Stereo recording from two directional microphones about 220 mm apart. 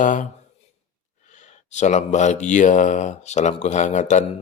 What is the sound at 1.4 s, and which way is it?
Speech, 30° left (ahead or behind).